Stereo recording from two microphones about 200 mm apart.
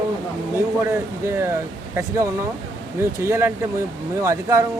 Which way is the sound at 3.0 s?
15° right (ahead or behind).